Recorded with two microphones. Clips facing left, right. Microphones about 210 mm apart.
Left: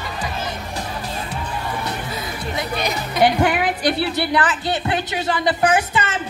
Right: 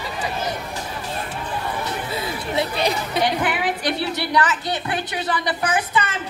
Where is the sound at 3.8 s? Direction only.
30° left (ahead or behind).